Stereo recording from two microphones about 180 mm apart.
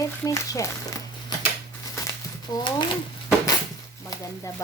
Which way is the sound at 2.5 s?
20° left (ahead or behind).